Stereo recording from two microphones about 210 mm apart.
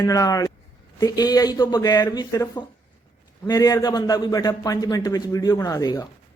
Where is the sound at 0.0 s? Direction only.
15° left (ahead or behind).